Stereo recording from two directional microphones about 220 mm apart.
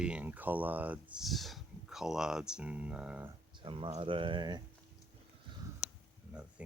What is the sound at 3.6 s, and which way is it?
Speech, 25° right (ahead or behind).